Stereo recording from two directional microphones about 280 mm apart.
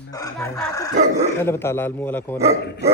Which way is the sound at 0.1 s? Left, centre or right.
Centre.